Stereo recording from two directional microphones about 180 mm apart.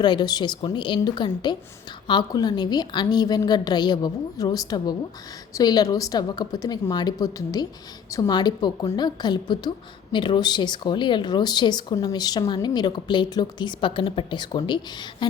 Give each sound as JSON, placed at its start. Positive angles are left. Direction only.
{"t": 0.0, "sound": "a woman's voice", "side_deg": 25}